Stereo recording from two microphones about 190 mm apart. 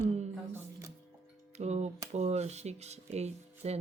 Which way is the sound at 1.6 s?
35° right (ahead or behind).